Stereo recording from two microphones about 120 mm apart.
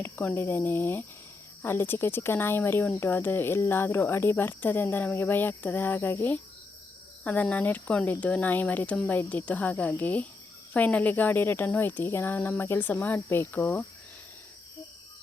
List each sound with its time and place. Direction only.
0.0 s speech: 15° left (ahead or behind)